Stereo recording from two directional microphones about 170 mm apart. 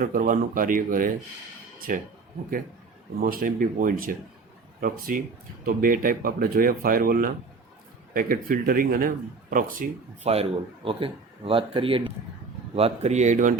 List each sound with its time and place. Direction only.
0.0 s speech: 55° right (ahead or behind)
3.2 s speech: 60° right (ahead or behind)
10.3 s a man's voice: 40° right (ahead or behind)